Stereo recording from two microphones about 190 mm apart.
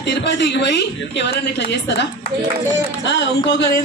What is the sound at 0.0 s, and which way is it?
A man's voice, 65° left (ahead or behind).